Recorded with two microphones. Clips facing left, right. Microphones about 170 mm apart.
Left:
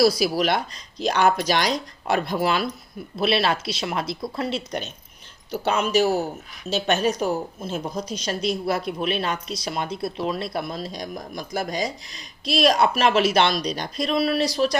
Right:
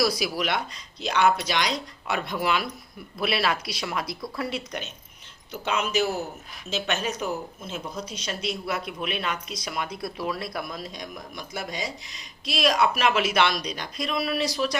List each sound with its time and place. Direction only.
0.0 s speech: 35° left (ahead or behind)